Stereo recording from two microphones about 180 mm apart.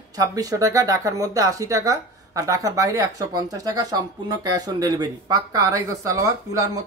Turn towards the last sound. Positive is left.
turn(degrees=-15)  # may be behind; listen again after turning